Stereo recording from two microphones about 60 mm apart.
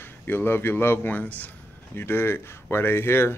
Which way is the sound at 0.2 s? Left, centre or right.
Left.